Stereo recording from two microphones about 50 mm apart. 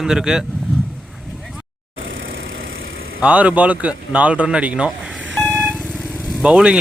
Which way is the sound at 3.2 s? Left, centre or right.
Right.